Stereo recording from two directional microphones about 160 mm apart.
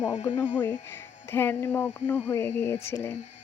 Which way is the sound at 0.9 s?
15° left (ahead or behind).